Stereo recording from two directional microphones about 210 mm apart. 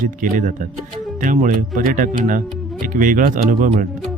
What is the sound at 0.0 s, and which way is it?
Speech, 40° right (ahead or behind).